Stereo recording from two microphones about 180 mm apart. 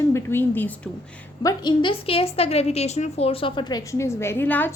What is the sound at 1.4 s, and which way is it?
A woman's voice, 25° left (ahead or behind).